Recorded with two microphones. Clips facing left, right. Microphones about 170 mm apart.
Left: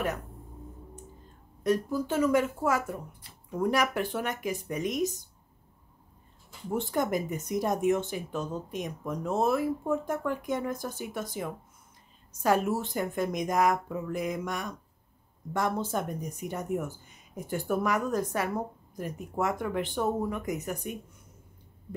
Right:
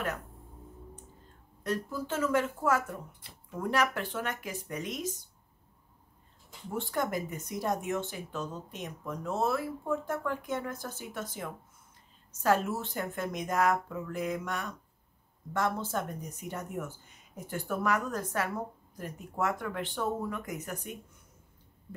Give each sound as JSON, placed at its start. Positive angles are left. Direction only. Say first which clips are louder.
{"t": 1.6, "sound": "speech", "louder": "left 6 dB", "side_deg": 15}
{"t": 6.7, "sound": "speech", "louder": "left 4 dB", "side_deg": 20}